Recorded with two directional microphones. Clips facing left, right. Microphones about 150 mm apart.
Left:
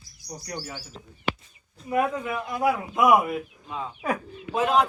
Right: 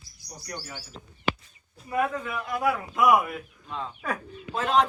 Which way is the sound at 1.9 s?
20° left (ahead or behind).